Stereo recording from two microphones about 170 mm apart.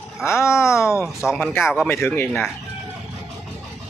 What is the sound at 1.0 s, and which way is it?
Speech, centre (ahead or behind).